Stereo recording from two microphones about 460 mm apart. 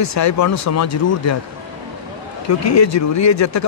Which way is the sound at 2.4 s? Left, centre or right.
Left.